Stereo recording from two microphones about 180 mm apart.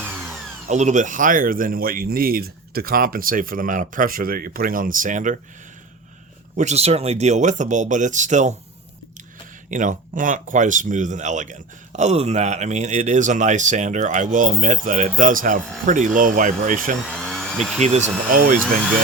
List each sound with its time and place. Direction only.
0.7 s speech: 40° right (ahead or behind)
6.6 s speech: 35° right (ahead or behind)
9.6 s speech: 45° right (ahead or behind)
17.2 s a sound: centre (ahead or behind)
17.7 s speech: 40° right (ahead or behind)